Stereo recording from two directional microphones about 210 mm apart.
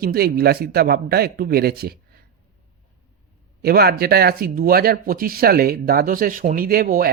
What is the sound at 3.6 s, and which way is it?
Speech, 50° right (ahead or behind).